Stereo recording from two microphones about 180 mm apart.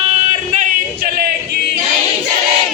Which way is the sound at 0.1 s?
40° right (ahead or behind).